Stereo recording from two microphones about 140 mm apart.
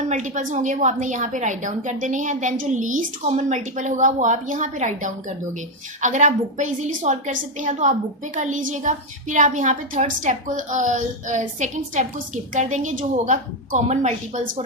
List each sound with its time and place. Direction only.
0.1 s a woman's voice: 60° right (ahead or behind)